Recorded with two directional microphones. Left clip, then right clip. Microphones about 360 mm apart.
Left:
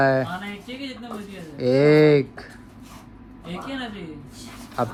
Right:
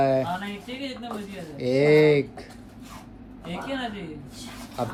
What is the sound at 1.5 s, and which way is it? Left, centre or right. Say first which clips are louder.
Speech: left 3 dB; centre.